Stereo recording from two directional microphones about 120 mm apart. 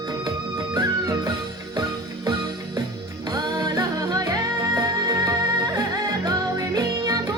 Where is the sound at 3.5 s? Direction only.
30° right (ahead or behind).